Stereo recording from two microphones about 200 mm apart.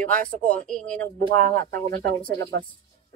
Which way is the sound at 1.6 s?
45° right (ahead or behind).